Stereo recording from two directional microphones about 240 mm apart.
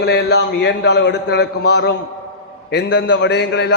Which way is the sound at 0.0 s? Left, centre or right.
Left.